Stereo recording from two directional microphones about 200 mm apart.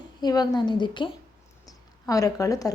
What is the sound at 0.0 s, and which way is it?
A woman's voice, 20° left (ahead or behind).